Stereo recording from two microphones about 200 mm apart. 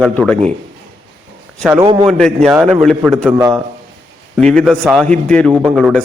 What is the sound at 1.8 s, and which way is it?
Speech, 25° right (ahead or behind).